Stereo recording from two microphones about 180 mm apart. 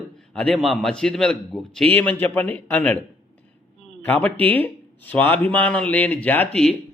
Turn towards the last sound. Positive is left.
turn(degrees=5)  # may be behind; listen again after turning